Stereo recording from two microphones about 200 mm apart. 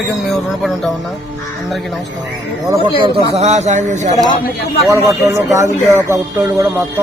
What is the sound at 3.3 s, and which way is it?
Speech, 35° right (ahead or behind).